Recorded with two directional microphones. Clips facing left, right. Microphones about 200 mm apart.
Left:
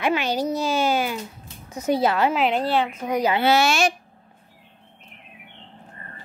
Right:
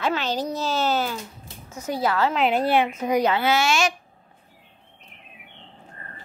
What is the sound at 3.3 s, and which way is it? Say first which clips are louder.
Speech: left 2 dB; 35° left (ahead or behind).